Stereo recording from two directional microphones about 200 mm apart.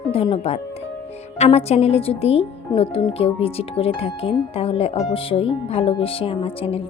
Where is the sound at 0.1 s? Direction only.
30° left (ahead or behind).